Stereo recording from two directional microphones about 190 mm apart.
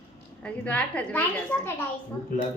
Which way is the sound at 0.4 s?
5° left (ahead or behind).